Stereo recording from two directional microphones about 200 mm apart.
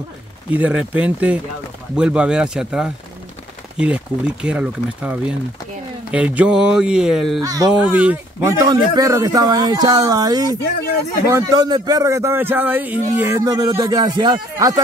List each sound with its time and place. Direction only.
0.5 s a man's voice: 5° right (ahead or behind)
7.4 s a man's voice: 20° right (ahead or behind)
7.7 s a man's voice: 5° right (ahead or behind)